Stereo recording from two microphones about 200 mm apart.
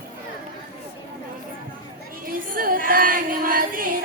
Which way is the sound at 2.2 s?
45° right (ahead or behind).